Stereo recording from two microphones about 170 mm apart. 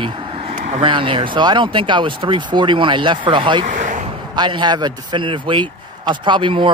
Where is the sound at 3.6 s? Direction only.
50° right (ahead or behind).